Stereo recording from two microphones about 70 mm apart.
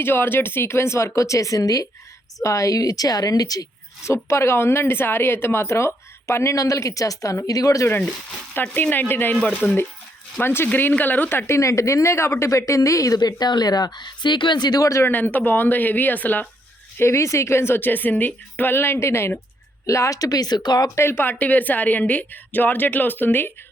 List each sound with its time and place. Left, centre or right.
0.0 s a woman's voice: left
4.0 s a woman's voice: left
8.7 s a woman's voice: left
13.1 s speech: left
15.0 s a woman's voice: left
17.0 s a woman's voice: left
19.9 s a woman's voice: left
20.9 s a woman's voice: left
21.2 s a woman's voice: left